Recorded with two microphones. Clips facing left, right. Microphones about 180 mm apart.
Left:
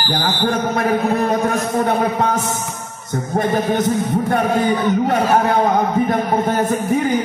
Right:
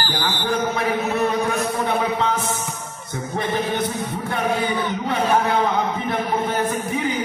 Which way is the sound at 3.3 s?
45° left (ahead or behind).